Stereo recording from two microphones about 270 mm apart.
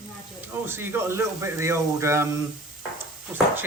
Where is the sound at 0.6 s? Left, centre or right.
Centre.